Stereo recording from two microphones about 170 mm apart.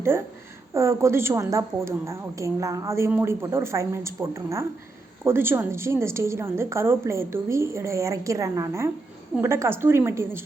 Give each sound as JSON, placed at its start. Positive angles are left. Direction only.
{"t": 0.7, "sound": "a woman's voice", "side_deg": -15}